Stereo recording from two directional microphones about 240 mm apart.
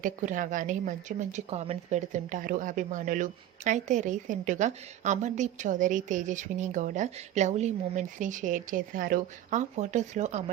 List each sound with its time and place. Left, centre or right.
0.0 s a woman's voice: right